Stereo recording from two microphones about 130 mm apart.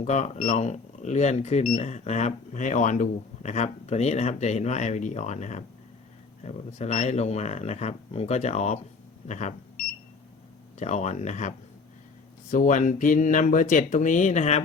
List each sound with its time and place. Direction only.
0.0 s speech: 65° left (ahead or behind)
10.8 s speech: 60° left (ahead or behind)
12.5 s speech: 75° left (ahead or behind)